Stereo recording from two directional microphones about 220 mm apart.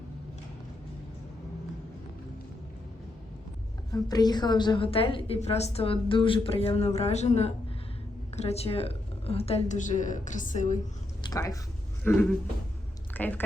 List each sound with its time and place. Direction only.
3.9 s a woman's voice: 20° left (ahead or behind); by 10.8 s 35° left (ahead or behind)
11.2 s a sound: 15° left (ahead or behind)
12.0 s speech: 5° left (ahead or behind)